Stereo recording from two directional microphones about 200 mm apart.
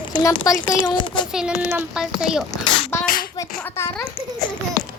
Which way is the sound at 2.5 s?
15° left (ahead or behind).